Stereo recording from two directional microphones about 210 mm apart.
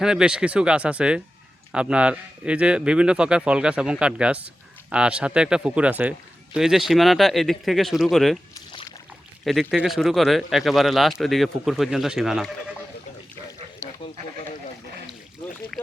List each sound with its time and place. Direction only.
0.0 s speech: 5° right (ahead or behind)
9.4 s speech: centre (ahead or behind)